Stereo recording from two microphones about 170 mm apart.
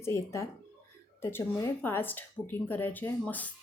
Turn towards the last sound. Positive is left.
turn(degrees=10)  # may be behind; listen again after turning